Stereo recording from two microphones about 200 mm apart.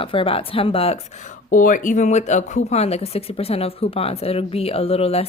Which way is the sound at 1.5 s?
40° left (ahead or behind).